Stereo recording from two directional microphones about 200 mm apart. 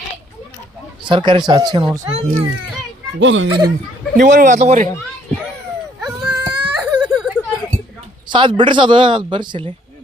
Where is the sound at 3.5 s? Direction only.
20° right (ahead or behind).